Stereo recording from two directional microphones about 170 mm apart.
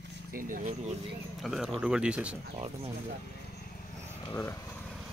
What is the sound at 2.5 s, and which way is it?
Speech, 35° right (ahead or behind).